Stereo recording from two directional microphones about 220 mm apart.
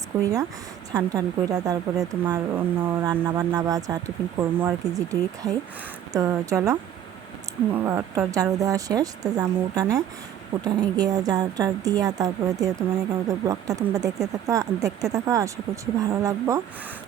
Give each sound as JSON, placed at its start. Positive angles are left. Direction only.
{"t": 0.1, "sound": "a woman's voice", "side_deg": -10}